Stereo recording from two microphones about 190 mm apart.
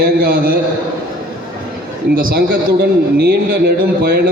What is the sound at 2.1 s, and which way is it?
A man's voice, 50° right (ahead or behind).